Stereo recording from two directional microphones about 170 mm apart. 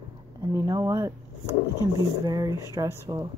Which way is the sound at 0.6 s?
20° right (ahead or behind).